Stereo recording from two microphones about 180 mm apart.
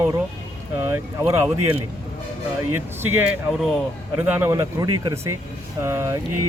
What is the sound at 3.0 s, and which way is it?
Speech, 10° right (ahead or behind).